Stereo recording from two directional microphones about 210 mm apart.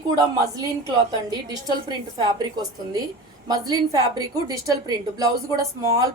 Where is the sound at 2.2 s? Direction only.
15° right (ahead or behind).